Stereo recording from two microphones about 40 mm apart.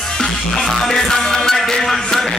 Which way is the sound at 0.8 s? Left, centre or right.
Centre.